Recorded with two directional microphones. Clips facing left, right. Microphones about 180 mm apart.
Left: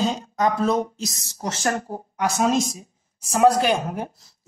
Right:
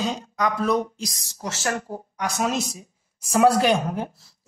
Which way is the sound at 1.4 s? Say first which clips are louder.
Left 3 dB; 40° left (ahead or behind).